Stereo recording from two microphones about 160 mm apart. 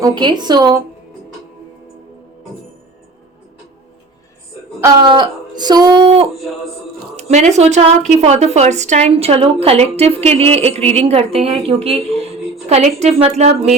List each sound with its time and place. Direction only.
0.0 s speech: 30° right (ahead or behind)
5.0 s speech: 30° right (ahead or behind)
7.2 s a woman's voice: 45° right (ahead or behind)